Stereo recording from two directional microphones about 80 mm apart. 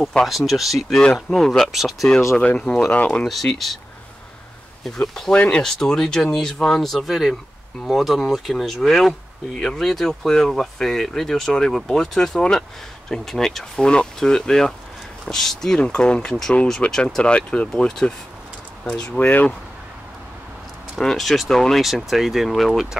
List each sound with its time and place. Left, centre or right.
0.1 s speech: centre
2.3 s speech: centre
3.3 s speech: centre
5.0 s speech: centre
5.4 s speech: centre
21.0 s speech: centre